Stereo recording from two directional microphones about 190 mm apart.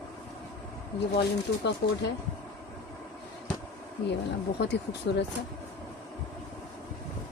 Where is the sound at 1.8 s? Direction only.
55° left (ahead or behind).